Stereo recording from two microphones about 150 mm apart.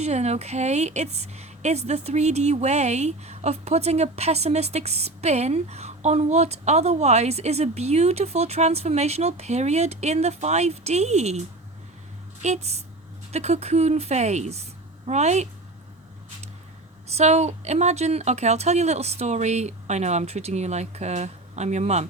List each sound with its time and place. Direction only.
0.0 s a woman's voice: 45° right (ahead or behind)
17.1 s a woman's voice: 45° right (ahead or behind)